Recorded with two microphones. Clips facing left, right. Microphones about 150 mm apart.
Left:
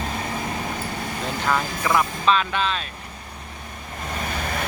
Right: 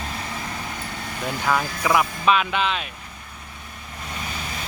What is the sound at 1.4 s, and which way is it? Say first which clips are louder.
Speech: right 1 dB; centre (ahead or behind).